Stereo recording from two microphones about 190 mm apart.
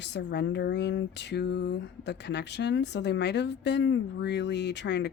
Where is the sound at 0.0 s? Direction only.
65° left (ahead or behind).